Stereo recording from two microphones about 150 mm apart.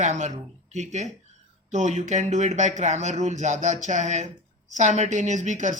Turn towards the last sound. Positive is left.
turn(degrees=-55)  # may be behind; listen again after turning